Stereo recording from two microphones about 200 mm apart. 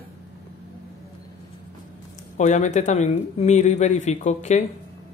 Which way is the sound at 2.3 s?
35° left (ahead or behind).